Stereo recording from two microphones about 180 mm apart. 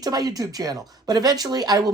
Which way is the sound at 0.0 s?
20° right (ahead or behind).